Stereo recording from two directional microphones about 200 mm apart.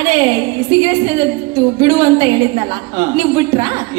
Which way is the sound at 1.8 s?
25° right (ahead or behind).